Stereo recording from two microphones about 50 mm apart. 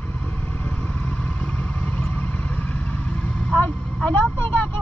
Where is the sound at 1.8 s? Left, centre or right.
Left.